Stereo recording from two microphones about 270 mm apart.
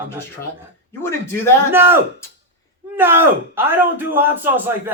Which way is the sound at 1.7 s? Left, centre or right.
Centre.